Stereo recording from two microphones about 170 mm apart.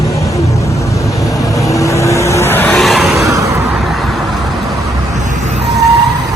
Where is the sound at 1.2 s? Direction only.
20° left (ahead or behind).